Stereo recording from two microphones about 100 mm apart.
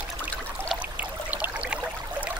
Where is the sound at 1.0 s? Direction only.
15° right (ahead or behind).